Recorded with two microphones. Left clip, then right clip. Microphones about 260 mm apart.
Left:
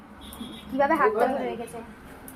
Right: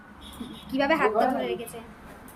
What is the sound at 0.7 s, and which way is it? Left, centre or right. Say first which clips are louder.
Speech: left 2 dB; centre.